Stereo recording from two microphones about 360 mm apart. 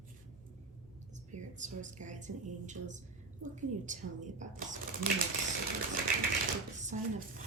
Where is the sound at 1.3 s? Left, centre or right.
Centre.